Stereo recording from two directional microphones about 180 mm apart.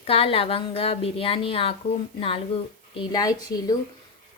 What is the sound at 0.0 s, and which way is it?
A woman's voice, 30° left (ahead or behind).